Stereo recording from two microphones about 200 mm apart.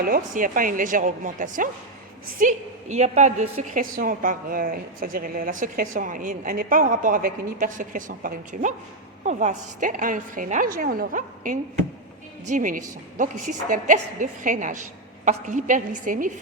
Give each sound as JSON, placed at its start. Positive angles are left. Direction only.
{"t": 0.0, "sound": "a woman's voice", "side_deg": -45}